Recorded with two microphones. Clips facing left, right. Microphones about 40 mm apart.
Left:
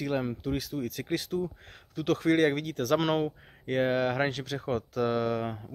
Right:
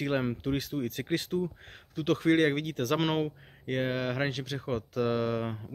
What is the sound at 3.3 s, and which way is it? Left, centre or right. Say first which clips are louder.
Speech: left 2 dB; centre.